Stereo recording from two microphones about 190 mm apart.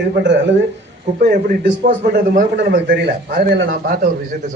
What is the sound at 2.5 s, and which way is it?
Speech, 65° right (ahead or behind).